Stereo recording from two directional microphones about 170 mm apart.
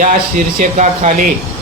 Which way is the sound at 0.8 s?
45° right (ahead or behind).